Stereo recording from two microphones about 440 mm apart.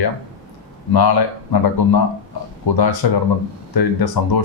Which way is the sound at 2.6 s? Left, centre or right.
Left.